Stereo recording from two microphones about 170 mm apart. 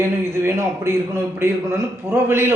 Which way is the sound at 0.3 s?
15° right (ahead or behind).